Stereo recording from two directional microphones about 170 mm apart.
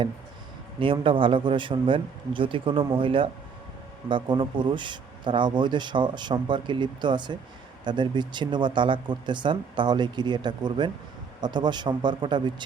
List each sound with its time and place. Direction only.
0.8 s speech: 30° right (ahead or behind)